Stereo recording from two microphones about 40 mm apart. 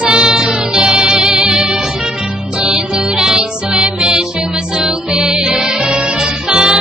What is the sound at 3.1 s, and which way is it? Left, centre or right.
Music, centre.